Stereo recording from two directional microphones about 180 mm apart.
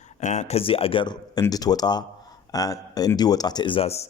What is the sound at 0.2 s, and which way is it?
A man's voice, 40° left (ahead or behind).